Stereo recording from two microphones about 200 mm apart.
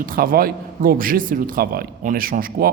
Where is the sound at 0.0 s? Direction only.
45° right (ahead or behind).